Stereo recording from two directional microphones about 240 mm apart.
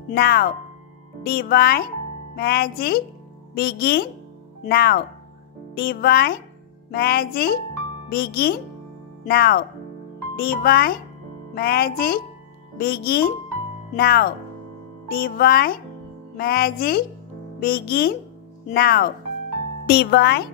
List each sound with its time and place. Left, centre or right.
0.1 s speech: left